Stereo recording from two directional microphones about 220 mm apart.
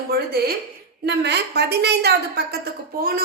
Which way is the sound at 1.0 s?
50° right (ahead or behind).